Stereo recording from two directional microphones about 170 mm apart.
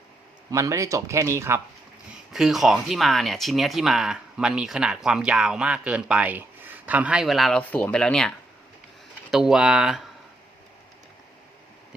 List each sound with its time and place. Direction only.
0.5 s speech: 20° right (ahead or behind)
2.1 s speech: centre (ahead or behind)
9.3 s speech: 5° right (ahead or behind)